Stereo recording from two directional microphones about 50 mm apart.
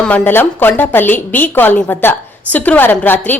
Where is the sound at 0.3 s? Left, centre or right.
Left.